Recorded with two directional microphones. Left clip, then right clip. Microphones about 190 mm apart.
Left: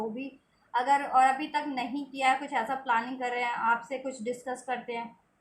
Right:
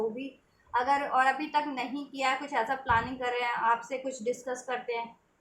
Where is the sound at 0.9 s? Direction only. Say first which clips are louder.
Left 3 dB; 15° right (ahead or behind).